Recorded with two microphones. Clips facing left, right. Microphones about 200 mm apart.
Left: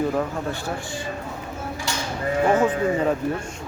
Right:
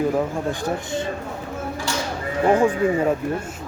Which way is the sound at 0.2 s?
15° right (ahead or behind).